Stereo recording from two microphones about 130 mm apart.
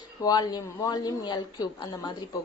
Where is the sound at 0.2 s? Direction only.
30° left (ahead or behind).